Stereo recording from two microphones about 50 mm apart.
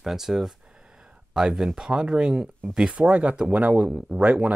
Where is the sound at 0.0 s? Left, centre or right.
Centre.